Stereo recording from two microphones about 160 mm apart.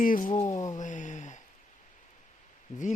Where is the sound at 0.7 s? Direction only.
50° left (ahead or behind).